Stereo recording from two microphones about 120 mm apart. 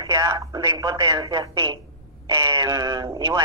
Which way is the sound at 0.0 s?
35° right (ahead or behind).